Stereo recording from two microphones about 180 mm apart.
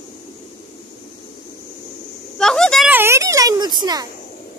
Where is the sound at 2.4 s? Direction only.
5° left (ahead or behind).